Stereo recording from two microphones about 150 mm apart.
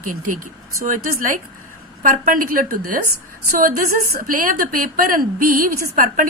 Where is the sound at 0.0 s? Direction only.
65° right (ahead or behind).